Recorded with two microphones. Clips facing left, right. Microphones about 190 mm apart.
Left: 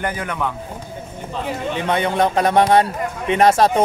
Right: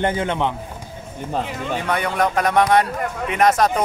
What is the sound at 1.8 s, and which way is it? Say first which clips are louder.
A man's voice: left 3 dB; 25° left (ahead or behind).